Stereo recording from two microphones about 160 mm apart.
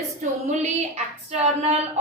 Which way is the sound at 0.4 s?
45° right (ahead or behind).